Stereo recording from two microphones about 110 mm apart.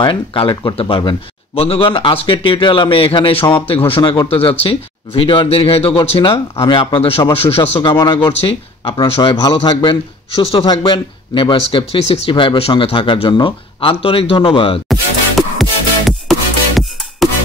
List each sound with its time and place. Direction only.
0.0 s speech: 50° left (ahead or behind)
6.3 s speech: 30° left (ahead or behind)
6.7 s speech: 50° left (ahead or behind)
7.9 s speech: 35° left (ahead or behind); by 14.8 s 55° left (ahead or behind)
14.9 s music: centre (ahead or behind)